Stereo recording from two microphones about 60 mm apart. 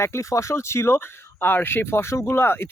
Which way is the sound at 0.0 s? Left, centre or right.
Left.